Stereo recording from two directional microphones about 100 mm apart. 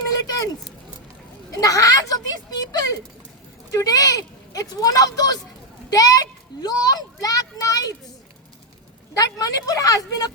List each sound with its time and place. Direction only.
0.1 s a sound: 40° left (ahead or behind)
1.5 s a child's voice: 35° left (ahead or behind)
3.7 s a child's voice: 35° left (ahead or behind)
9.1 s a child's voice: 35° left (ahead or behind)